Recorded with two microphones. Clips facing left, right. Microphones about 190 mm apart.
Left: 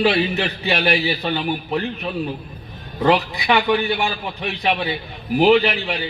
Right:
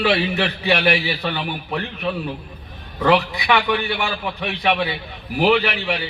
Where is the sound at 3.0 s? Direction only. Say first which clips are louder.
Even; 25° left (ahead or behind).